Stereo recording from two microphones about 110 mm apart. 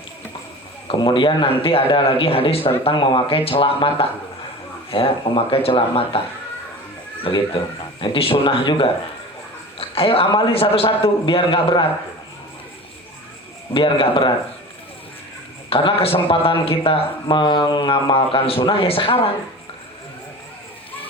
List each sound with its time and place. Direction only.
0.9 s speech: 45° left (ahead or behind)
7.3 s a man's voice: 50° left (ahead or behind)
13.7 s speech: 50° left (ahead or behind)
15.7 s speech: 55° left (ahead or behind)